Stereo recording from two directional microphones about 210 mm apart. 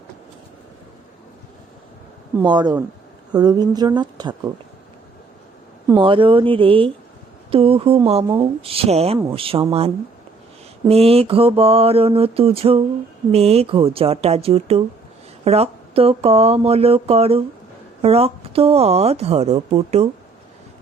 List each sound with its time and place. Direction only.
2.4 s speech: 20° right (ahead or behind)
5.9 s speech: 25° right (ahead or behind)